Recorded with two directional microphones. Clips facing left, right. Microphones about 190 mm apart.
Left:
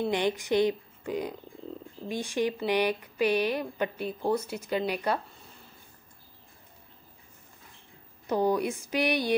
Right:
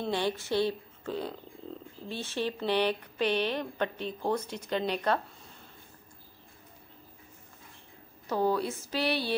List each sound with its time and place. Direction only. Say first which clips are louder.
0.0 s speech: left 3 dB; 15° left (ahead or behind)
8.3 s speech: left 2 dB; 15° left (ahead or behind)